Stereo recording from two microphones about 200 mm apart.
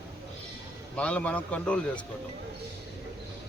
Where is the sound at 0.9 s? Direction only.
5° left (ahead or behind).